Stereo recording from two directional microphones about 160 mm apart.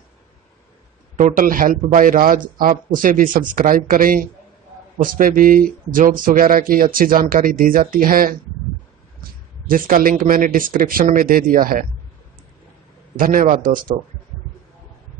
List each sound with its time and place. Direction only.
1.1 s speech: 60° right (ahead or behind)
9.7 s speech: 60° right (ahead or behind)
13.1 s speech: 60° right (ahead or behind)